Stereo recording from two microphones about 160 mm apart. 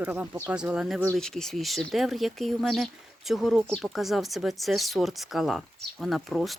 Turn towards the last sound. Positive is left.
turn(degrees=0)  # may be behind; listen again after turning